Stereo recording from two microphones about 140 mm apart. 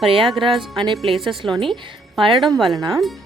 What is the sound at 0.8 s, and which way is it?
Speech, 35° right (ahead or behind).